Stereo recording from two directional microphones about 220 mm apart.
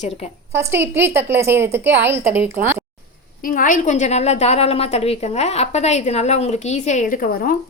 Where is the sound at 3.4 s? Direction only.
40° left (ahead or behind).